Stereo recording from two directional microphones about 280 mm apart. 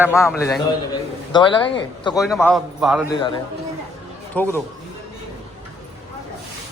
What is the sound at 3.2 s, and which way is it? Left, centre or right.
Speech, centre.